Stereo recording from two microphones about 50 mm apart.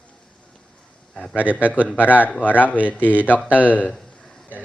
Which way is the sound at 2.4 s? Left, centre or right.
Left.